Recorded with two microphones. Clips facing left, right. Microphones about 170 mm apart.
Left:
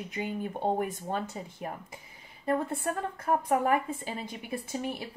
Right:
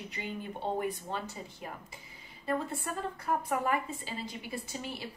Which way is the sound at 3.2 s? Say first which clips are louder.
Left 5 dB; 50° left (ahead or behind).